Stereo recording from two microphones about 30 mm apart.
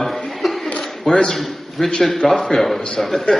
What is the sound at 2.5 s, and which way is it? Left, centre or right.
Speech, centre.